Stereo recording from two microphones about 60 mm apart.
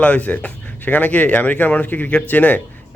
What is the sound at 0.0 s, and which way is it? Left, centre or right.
Speech, left.